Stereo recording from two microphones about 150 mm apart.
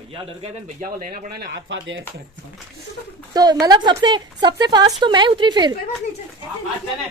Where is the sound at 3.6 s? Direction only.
25° right (ahead or behind).